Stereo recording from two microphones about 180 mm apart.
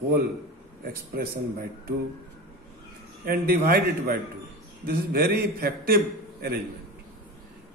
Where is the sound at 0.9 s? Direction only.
55° right (ahead or behind).